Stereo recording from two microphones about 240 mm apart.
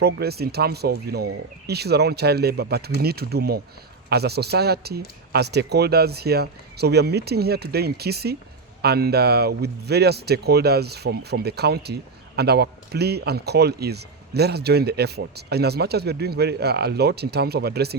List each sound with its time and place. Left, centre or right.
0.0 s speech: right